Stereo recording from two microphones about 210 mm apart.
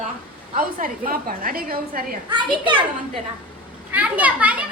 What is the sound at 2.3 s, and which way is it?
Speech, 25° right (ahead or behind).